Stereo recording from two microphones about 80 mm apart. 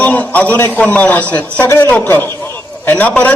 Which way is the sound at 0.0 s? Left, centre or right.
Centre.